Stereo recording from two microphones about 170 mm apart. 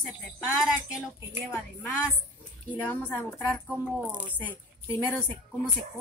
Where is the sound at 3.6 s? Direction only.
10° right (ahead or behind).